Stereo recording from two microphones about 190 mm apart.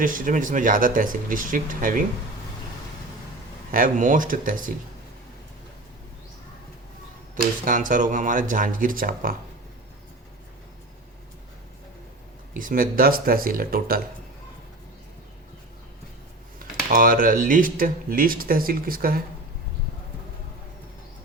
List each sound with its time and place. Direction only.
0.0 s speech: 45° right (ahead or behind)
3.7 s speech: 45° right (ahead or behind)
7.6 s speech: 45° right (ahead or behind)
12.5 s speech: 45° right (ahead or behind)
16.6 s speech: 50° right (ahead or behind)